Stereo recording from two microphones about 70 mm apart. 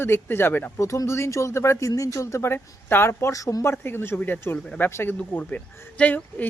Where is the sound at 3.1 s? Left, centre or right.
Left.